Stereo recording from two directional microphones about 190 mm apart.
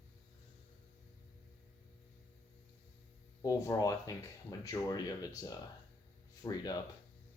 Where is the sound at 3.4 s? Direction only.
20° left (ahead or behind).